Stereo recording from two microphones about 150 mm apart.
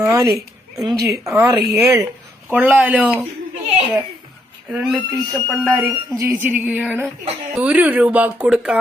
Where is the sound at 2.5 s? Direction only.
10° right (ahead or behind).